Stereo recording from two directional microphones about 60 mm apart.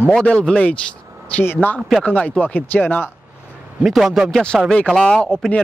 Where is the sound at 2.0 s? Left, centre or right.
Left.